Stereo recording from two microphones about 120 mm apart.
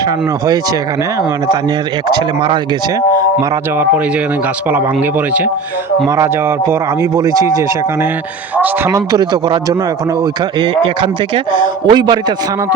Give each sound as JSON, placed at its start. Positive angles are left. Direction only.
{"t": 2.0, "sound": "speech", "side_deg": -40}
{"t": 7.3, "sound": "speech", "side_deg": -30}
{"t": 8.9, "sound": "speech", "side_deg": -35}
{"t": 11.5, "sound": "speech", "side_deg": -40}